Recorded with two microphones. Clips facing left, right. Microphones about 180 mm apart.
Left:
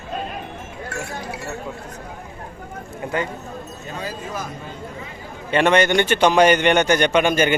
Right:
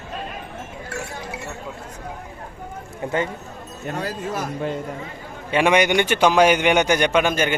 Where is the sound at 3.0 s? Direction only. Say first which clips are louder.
Right 1 dB; 25° right (ahead or behind).